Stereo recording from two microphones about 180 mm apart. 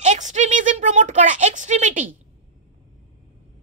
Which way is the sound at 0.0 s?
40° right (ahead or behind).